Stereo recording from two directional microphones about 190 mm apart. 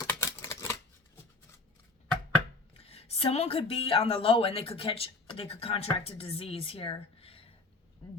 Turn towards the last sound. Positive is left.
turn(degrees=30)  # may be behind; listen again after turning